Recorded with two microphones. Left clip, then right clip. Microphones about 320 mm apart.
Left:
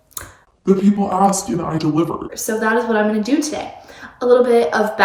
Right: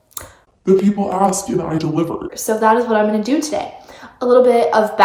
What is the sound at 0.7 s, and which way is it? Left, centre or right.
A woman's voice, centre.